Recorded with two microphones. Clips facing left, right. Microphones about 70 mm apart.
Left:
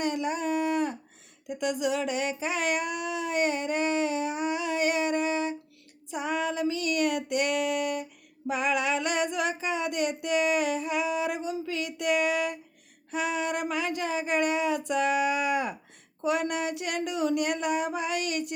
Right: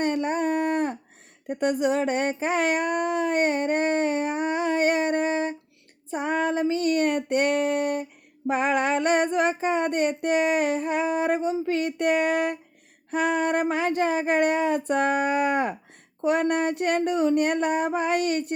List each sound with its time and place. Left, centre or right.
0.0 s a sound: right
1.5 s speech: right
6.1 s female singing: right